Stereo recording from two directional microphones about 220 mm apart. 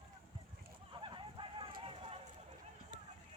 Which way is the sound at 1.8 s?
25° right (ahead or behind).